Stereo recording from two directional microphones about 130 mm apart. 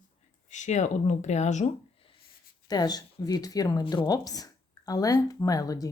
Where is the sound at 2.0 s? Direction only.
45° left (ahead or behind).